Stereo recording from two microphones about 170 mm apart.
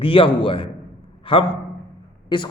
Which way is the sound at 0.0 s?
30° left (ahead or behind).